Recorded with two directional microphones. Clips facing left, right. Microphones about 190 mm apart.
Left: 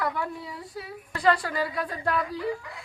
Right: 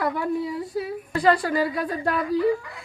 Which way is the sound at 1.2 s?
40° right (ahead or behind).